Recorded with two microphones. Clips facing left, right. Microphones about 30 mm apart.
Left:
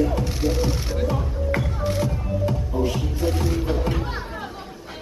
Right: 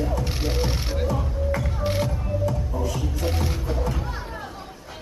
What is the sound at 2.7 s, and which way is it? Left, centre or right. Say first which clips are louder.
Music: left 4 dB; left.